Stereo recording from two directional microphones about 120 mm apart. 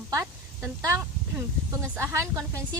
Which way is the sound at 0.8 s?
25° right (ahead or behind).